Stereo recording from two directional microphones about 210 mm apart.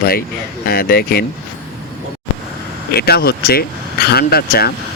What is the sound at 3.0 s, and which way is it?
Speech, 50° left (ahead or behind).